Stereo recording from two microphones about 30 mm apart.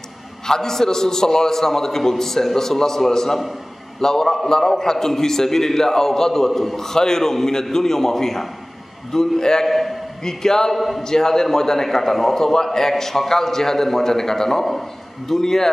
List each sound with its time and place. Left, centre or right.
0.5 s a man's voice: centre
9.7 s a man's voice: centre
10.2 s a man's voice: centre
10.7 s a man's voice: centre
11.1 s a man's voice: centre